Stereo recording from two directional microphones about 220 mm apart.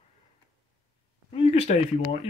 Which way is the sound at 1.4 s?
30° left (ahead or behind).